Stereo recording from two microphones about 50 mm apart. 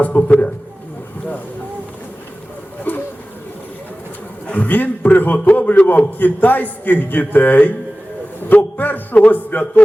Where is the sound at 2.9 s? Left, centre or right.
Left.